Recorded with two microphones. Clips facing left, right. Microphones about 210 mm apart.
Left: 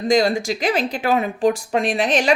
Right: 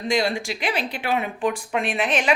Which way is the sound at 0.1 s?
40° left (ahead or behind).